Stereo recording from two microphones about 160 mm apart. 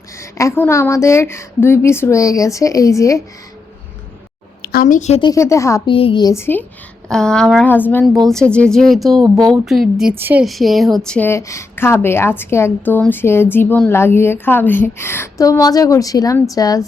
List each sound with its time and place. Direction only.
0.2 s a woman's voice: 20° left (ahead or behind)
4.6 s a woman's voice: 70° left (ahead or behind); by 5.2 s 45° left (ahead or behind)
5.2 s a woman's voice: 20° left (ahead or behind)
5.9 s a woman's voice: 35° left (ahead or behind); by 10.4 s 10° right (ahead or behind)
10.4 s a woman's voice: centre (ahead or behind); by 16.8 s 20° left (ahead or behind)